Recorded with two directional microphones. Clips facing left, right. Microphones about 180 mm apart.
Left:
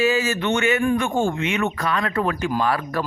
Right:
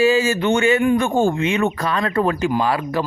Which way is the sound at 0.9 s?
35° right (ahead or behind).